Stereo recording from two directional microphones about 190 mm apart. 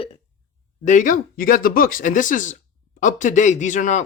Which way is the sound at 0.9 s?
45° left (ahead or behind).